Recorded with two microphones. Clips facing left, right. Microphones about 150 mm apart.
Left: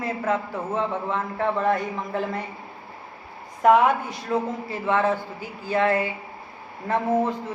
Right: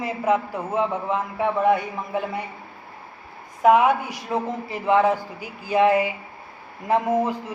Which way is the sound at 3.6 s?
5° right (ahead or behind).